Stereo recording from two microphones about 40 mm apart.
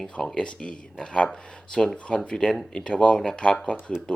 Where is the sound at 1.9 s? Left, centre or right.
Left.